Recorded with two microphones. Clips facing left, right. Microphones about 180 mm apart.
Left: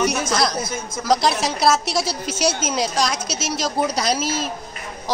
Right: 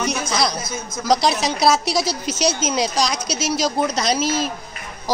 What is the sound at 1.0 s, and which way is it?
Music, 5° left (ahead or behind).